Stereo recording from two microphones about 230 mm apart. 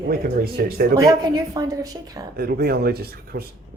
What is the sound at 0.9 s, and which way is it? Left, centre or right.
Speech, centre.